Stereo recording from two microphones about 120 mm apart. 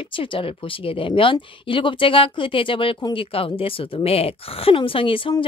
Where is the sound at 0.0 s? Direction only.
45° left (ahead or behind).